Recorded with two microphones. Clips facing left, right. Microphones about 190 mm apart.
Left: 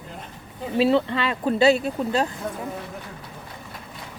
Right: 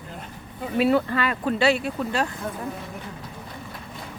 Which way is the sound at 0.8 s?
25° left (ahead or behind).